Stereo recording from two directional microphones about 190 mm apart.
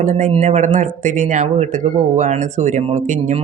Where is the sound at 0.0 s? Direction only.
40° right (ahead or behind).